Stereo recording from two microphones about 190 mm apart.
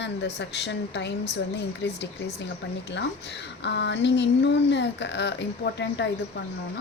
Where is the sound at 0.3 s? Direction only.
65° left (ahead or behind).